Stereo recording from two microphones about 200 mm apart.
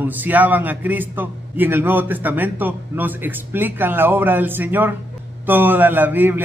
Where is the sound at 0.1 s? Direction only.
10° right (ahead or behind).